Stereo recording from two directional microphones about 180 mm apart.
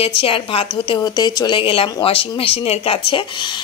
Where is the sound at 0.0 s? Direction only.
30° left (ahead or behind).